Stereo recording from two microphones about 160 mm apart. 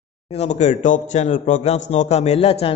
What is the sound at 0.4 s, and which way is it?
A man's voice, 45° left (ahead or behind).